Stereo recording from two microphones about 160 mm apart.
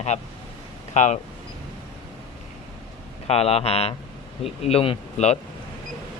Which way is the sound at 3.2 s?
40° left (ahead or behind).